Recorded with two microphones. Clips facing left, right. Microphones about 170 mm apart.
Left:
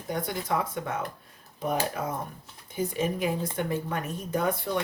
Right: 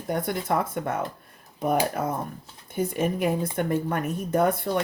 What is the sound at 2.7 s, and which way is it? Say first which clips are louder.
Speech: right 3 dB; 55° right (ahead or behind).